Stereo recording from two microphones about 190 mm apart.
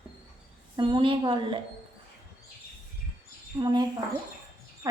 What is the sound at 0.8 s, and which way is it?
Speech, 25° right (ahead or behind).